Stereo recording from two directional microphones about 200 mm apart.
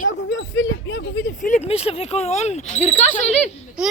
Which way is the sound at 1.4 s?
40° left (ahead or behind).